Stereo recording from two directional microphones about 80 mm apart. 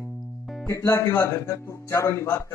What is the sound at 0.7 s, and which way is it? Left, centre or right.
Speech, left.